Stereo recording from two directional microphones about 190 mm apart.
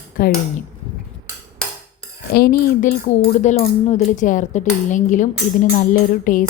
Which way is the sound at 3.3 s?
40° left (ahead or behind).